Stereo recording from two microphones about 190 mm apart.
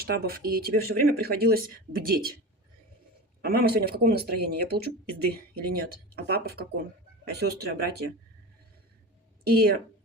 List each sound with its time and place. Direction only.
0.0 s speech: 50° right (ahead or behind)
3.4 s speech: 55° right (ahead or behind)
9.5 s speech: 55° right (ahead or behind)